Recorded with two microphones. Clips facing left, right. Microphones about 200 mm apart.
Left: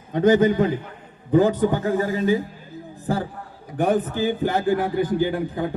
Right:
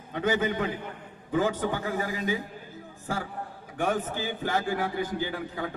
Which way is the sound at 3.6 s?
35° left (ahead or behind).